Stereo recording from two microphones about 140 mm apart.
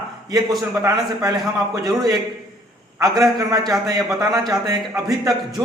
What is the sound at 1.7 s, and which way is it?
Speech, 30° right (ahead or behind).